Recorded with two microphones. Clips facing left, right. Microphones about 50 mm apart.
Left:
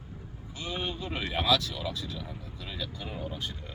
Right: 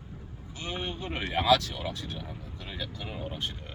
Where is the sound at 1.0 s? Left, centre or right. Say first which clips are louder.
Right 4 dB; right.